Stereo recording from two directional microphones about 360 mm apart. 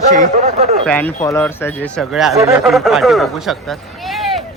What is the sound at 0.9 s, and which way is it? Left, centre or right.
Speech, centre.